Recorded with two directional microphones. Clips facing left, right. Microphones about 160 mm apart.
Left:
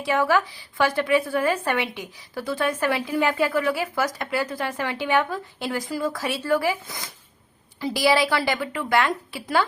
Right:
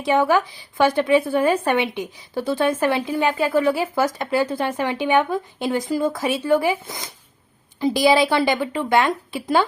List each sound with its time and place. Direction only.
0.0 s a woman's voice: 20° right (ahead or behind)